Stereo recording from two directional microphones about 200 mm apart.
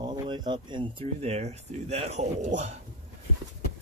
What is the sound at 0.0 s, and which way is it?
Speech, 20° right (ahead or behind).